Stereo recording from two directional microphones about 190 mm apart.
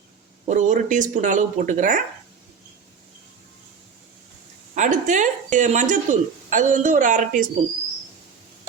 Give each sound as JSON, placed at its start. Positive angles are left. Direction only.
{"t": 0.4, "sound": "speech", "side_deg": -40}
{"t": 4.7, "sound": "speech", "side_deg": -40}